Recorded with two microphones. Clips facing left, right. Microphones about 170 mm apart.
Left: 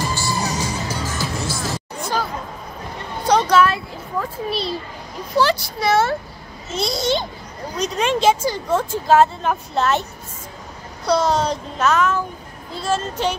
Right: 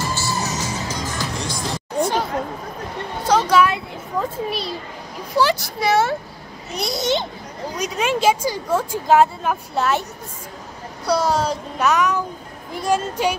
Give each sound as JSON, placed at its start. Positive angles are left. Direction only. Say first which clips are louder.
{"t": 0.1, "sound": "music", "louder": "left 1 dB", "side_deg": 15}
{"t": 3.3, "sound": "children playing", "louder": "left 1 dB", "side_deg": -5}
{"t": 5.4, "sound": "a sound", "louder": "even", "side_deg": -15}
{"t": 6.7, "sound": "a child's voice", "louder": "left 1 dB", "side_deg": -20}
{"t": 11.1, "sound": "speech", "louder": "left 1 dB", "side_deg": -10}